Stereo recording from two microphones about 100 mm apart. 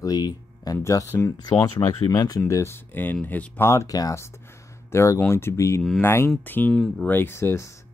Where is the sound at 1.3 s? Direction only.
40° left (ahead or behind).